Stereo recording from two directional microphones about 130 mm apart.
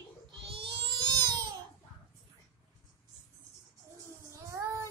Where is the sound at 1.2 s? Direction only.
30° right (ahead or behind).